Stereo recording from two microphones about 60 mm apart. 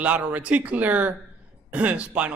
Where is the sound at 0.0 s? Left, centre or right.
Right.